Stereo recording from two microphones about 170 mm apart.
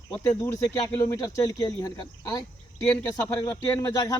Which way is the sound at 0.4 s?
20° left (ahead or behind).